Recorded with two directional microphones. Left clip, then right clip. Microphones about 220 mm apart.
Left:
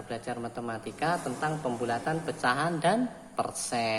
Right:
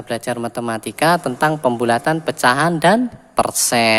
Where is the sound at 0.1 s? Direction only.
45° right (ahead or behind).